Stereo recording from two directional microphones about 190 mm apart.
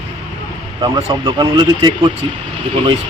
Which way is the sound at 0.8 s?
20° right (ahead or behind).